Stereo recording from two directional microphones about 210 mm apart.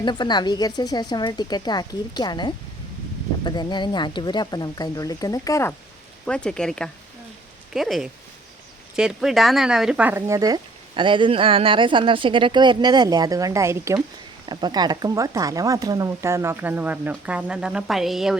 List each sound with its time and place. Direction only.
0.0 s speech: 20° left (ahead or behind); by 18.3 s centre (ahead or behind)